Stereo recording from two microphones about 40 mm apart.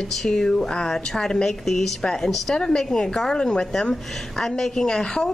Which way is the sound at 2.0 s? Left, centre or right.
Left.